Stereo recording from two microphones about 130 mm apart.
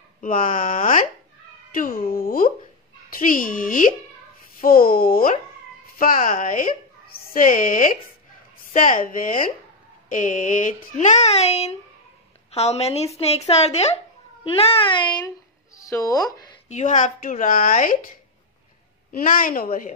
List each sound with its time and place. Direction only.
0.2 s speech: 90° left
10.0 s a woman's voice: 75° left (ahead or behind); by 16.5 s 30° left (ahead or behind)
16.6 s speech: 65° left (ahead or behind); by 17.9 s 90° left
19.2 s speech: 90° left